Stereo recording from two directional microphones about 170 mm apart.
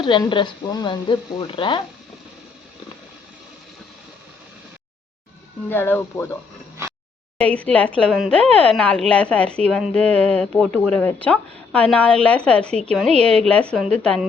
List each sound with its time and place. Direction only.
0.0 s speech: 25° left (ahead or behind)
5.6 s speech: 15° left (ahead or behind)
7.5 s a woman's voice: 10° left (ahead or behind)